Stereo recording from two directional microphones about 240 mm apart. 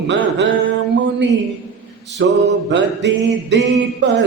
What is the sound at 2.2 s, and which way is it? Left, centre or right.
Music, right.